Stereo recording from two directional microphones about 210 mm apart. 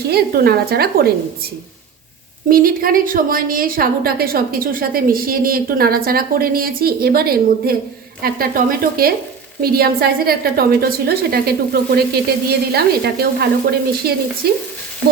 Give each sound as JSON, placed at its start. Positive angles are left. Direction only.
{"t": 0.1, "sound": "a woman's voice", "side_deg": -45}
{"t": 2.5, "sound": "a woman's voice", "side_deg": -45}